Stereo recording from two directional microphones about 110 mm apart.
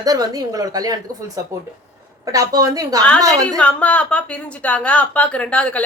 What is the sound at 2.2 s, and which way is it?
Speech, 30° right (ahead or behind).